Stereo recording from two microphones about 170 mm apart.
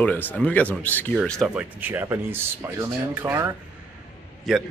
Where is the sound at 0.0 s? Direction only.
10° left (ahead or behind).